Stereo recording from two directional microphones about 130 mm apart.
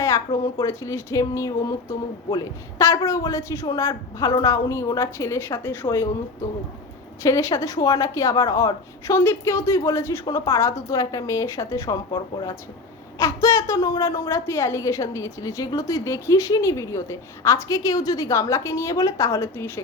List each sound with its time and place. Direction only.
0.6 s a woman's voice: 25° left (ahead or behind)
7.2 s a woman's voice: 25° left (ahead or behind)